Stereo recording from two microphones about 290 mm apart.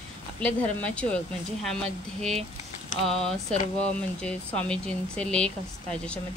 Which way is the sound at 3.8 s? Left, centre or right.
Centre.